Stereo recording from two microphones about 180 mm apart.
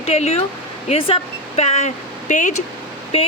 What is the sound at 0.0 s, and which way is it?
Speech, 35° left (ahead or behind).